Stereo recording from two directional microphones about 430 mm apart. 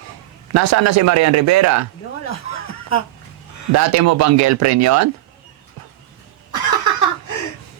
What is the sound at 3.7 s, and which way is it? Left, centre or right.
Speech, right.